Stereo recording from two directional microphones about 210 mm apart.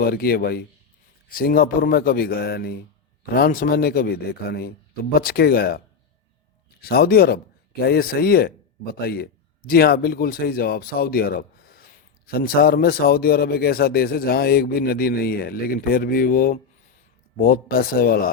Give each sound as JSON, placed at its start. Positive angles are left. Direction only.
{"t": 0.0, "sound": "a man's voice", "side_deg": 45}
{"t": 6.8, "sound": "a man's voice", "side_deg": 45}